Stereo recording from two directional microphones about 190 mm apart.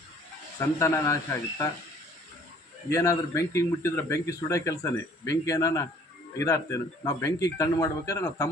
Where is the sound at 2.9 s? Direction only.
15° left (ahead or behind).